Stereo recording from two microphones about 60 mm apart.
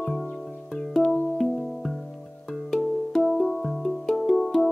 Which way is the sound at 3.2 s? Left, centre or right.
Centre.